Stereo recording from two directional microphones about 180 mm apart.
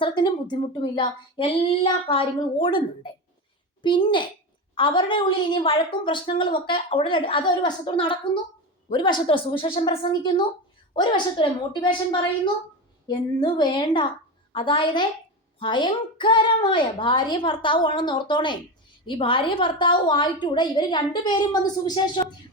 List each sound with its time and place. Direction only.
0.0 s a woman's voice: 25° left (ahead or behind)